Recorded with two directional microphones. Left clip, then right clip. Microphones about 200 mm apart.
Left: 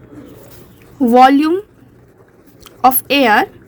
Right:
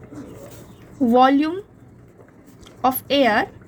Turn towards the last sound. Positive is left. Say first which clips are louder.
# left 6 dB
turn(degrees=35)  # may be behind; listen again after turning